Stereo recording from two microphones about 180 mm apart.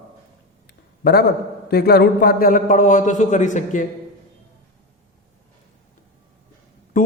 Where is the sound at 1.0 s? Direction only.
65° left (ahead or behind); by 3.8 s 45° left (ahead or behind).